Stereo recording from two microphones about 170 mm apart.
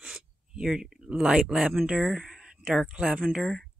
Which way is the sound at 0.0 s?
5° right (ahead or behind).